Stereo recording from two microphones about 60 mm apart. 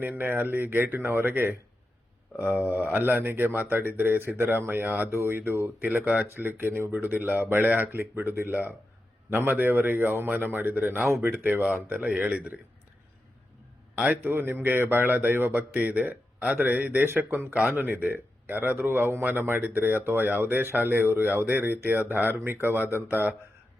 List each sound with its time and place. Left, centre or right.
0.0 s speech: right
13.9 s speech: right